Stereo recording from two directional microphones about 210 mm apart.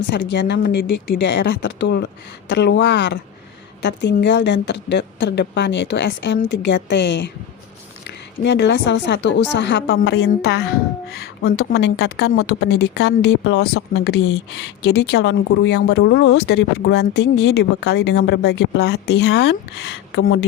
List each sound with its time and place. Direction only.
0.1 s a woman's voice: 55° left (ahead or behind)
8.4 s a woman's voice: 55° left (ahead or behind)
11.7 s speech: 50° left (ahead or behind)
20.1 s speech: 70° left (ahead or behind)